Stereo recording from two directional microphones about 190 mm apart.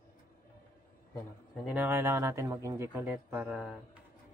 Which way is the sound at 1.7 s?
10° right (ahead or behind).